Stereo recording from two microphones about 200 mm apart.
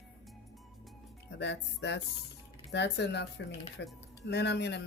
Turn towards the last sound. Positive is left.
turn(degrees=60)  # may be behind; listen again after turning